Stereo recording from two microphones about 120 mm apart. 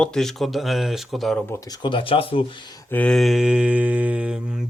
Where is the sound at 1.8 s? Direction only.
45° left (ahead or behind).